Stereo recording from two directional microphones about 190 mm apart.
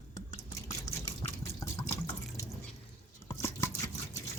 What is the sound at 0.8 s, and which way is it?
Water, 15° left (ahead or behind).